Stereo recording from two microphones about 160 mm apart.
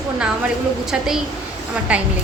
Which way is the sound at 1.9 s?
5° right (ahead or behind).